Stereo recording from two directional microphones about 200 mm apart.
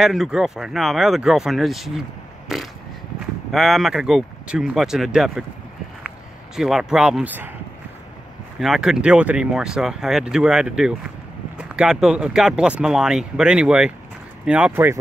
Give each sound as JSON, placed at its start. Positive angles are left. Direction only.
{"t": 0.0, "sound": "speech", "side_deg": 0}
{"t": 8.5, "sound": "speech", "side_deg": 0}